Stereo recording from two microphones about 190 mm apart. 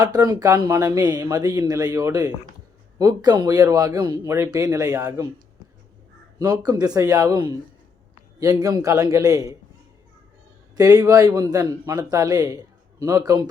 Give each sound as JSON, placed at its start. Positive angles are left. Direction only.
{"t": 0.0, "sound": "speech", "side_deg": -20}
{"t": 6.4, "sound": "speech", "side_deg": -20}
{"t": 8.6, "sound": "speech", "side_deg": -20}
{"t": 10.8, "sound": "speech", "side_deg": -20}